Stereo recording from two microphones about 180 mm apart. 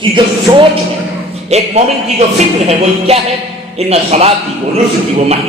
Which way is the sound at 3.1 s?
35° right (ahead or behind).